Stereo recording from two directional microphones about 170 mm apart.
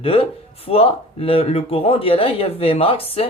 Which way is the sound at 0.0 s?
35° left (ahead or behind).